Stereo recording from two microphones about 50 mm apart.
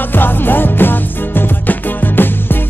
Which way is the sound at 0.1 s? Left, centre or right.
Left.